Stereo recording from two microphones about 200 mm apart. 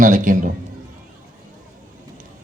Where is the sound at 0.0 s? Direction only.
40° right (ahead or behind).